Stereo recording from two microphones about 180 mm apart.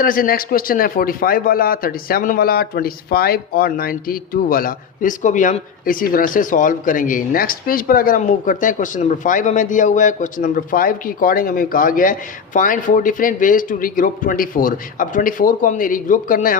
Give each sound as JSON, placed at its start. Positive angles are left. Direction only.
{"t": 0.0, "sound": "speech", "side_deg": 50}